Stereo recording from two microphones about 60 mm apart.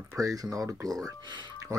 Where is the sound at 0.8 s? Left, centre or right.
Right.